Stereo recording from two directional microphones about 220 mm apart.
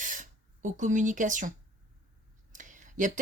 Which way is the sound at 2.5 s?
35° right (ahead or behind).